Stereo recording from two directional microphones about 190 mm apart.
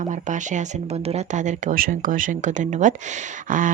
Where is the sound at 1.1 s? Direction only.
40° right (ahead or behind).